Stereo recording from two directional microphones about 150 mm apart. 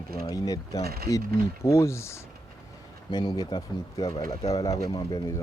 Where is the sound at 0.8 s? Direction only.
90° right.